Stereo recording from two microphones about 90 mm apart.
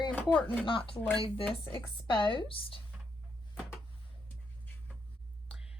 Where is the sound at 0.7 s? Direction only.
80° left.